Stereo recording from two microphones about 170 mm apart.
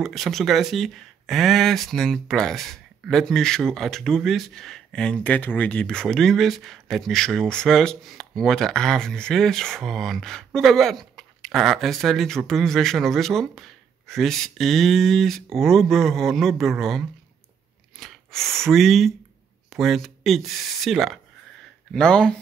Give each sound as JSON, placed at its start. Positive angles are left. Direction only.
{"t": 0.0, "sound": "speech", "side_deg": 0}